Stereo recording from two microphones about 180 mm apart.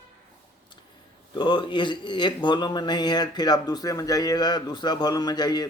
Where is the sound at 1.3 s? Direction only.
25° left (ahead or behind).